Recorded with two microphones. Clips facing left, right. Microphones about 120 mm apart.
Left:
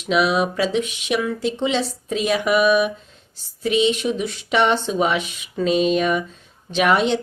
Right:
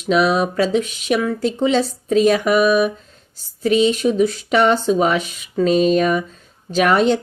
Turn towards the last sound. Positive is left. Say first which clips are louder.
# right 3 dB
turn(degrees=-40)  # may be behind; listen again after turning